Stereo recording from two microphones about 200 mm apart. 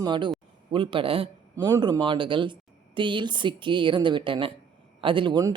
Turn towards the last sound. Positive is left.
turn(degrees=-20)  # may be behind; listen again after turning